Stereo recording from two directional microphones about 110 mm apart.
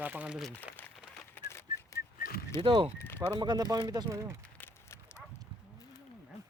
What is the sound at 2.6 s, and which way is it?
Speech, 50° right (ahead or behind).